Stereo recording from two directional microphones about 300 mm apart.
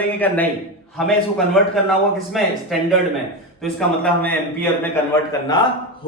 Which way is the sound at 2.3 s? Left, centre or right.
Centre.